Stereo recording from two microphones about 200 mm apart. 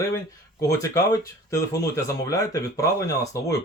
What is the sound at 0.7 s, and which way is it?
Speech, 15° left (ahead or behind).